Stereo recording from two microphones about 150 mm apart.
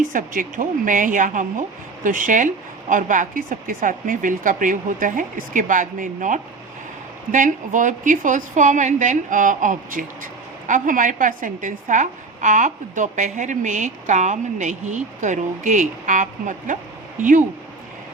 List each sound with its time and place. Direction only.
0.0 s a woman's voice: 65° right (ahead or behind)